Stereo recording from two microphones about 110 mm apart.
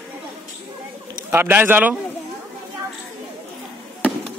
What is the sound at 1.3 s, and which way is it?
Speech, 20° right (ahead or behind).